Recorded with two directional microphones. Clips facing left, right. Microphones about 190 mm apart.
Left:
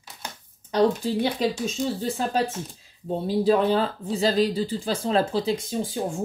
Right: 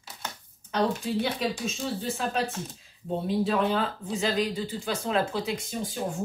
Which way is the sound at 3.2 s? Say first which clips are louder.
Left 5 dB; 35° left (ahead or behind).